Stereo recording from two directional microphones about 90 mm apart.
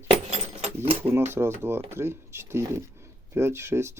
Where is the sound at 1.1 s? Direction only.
25° right (ahead or behind).